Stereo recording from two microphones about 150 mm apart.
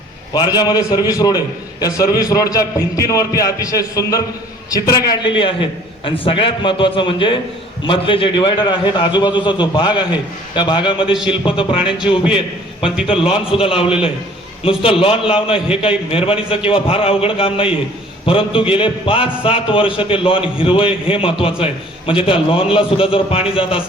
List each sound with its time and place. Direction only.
0.3 s a man's voice: 30° left (ahead or behind)
11.8 s a man's voice: 5° right (ahead or behind)
13.1 s a man's voice: 35° left (ahead or behind)